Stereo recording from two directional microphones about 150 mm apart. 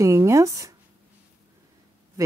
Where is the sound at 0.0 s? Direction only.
20° right (ahead or behind).